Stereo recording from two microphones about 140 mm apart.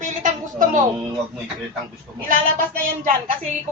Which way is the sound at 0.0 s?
65° right (ahead or behind).